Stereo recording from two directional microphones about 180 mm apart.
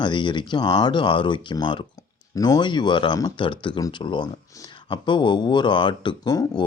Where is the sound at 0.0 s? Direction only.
25° left (ahead or behind).